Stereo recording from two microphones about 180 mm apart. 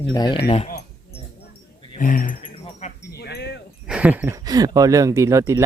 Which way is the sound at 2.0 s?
50° left (ahead or behind).